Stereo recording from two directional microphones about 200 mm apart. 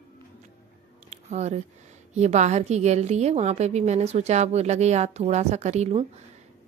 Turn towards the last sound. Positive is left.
turn(degrees=-30)  # may be behind; listen again after turning